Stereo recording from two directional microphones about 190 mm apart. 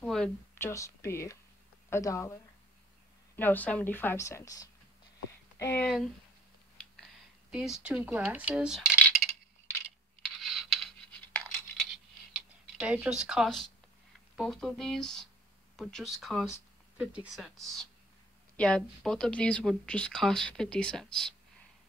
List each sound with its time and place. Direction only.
0.0 s speech: 5° left (ahead or behind)
3.3 s speech: 10° left (ahead or behind)
7.5 s speech: 5° right (ahead or behind)
10.2 s a sound: centre (ahead or behind)
12.4 s speech: 5° right (ahead or behind)